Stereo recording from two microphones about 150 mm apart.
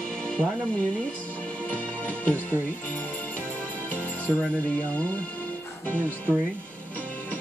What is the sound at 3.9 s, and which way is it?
Speech, 10° left (ahead or behind).